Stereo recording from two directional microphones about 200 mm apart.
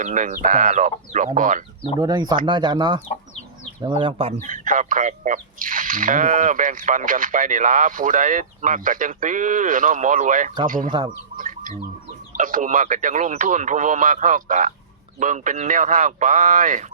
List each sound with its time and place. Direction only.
0.0 s speech: 35° right (ahead or behind)
2.0 s speech: 20° right (ahead or behind)
4.4 s speech: 40° right (ahead or behind)
11.3 s chicken: 40° right (ahead or behind)
12.4 s speech: 40° right (ahead or behind)